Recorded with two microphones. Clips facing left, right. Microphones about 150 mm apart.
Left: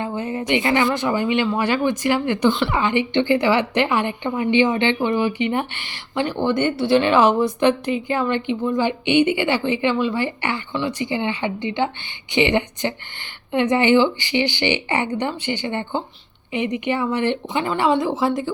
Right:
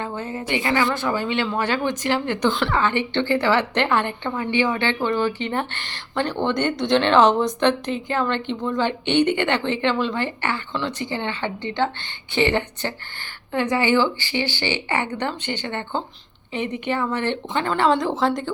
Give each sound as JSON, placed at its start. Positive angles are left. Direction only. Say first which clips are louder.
{"t": 0.0, "sound": "a woman's voice", "louder": "left 4 dB", "side_deg": 15}
{"t": 2.7, "sound": "a woman's voice", "louder": "left 2 dB", "side_deg": 15}